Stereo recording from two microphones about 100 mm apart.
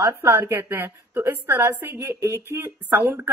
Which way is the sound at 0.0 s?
25° right (ahead or behind).